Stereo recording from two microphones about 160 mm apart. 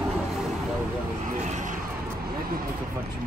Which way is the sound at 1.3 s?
45° right (ahead or behind).